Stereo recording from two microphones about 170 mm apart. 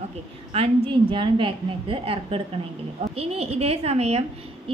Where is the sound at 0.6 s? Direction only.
30° right (ahead or behind).